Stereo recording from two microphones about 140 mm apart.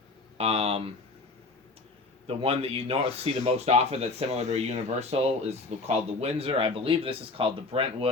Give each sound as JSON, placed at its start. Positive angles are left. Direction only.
{"t": 0.3, "sound": "speech", "side_deg": -45}
{"t": 2.2, "sound": "speech", "side_deg": -45}